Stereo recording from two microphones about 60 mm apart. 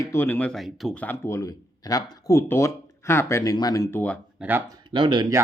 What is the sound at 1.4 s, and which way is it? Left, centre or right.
Speech, left.